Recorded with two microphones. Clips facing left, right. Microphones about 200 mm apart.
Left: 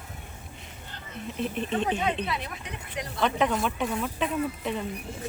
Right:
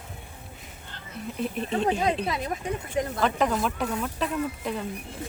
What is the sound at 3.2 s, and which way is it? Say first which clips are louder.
Speech: left 1 dB; centre (ahead or behind).